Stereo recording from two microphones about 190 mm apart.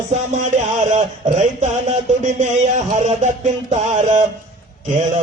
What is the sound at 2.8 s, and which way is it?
Speech, 40° right (ahead or behind).